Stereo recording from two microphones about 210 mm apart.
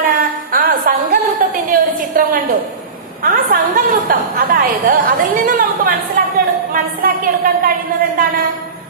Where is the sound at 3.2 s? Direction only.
40° right (ahead or behind).